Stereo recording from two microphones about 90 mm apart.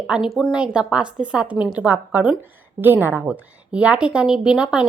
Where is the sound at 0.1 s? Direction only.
5° right (ahead or behind).